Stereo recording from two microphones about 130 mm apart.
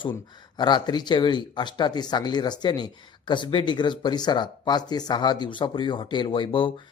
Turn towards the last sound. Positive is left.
turn(degrees=40)  # may be behind; listen again after turning